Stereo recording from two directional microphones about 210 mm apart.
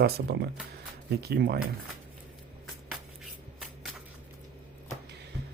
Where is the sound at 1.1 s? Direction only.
50° right (ahead or behind).